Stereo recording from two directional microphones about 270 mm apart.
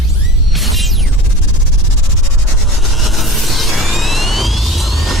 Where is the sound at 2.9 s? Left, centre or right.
Centre.